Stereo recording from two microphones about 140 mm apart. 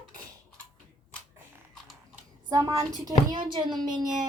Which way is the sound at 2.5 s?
25° right (ahead or behind).